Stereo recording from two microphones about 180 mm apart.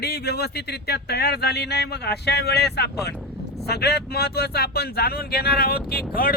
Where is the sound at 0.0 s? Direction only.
60° left (ahead or behind).